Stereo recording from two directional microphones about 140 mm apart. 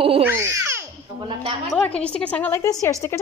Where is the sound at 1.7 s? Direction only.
10° left (ahead or behind).